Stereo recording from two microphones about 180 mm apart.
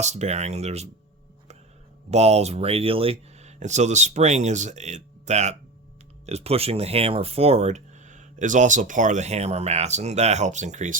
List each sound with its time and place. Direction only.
0.0 s speech: 40° right (ahead or behind)
2.0 s speech: 35° right (ahead or behind)